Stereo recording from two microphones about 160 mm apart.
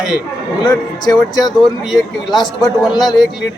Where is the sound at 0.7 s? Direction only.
25° left (ahead or behind).